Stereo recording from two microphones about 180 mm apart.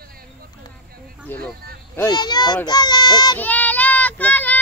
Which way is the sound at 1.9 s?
20° left (ahead or behind).